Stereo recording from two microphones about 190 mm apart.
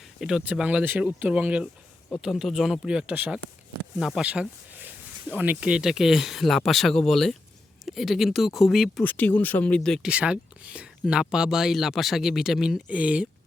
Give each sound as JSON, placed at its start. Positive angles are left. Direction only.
{"t": 0.2, "sound": "speech", "side_deg": -5}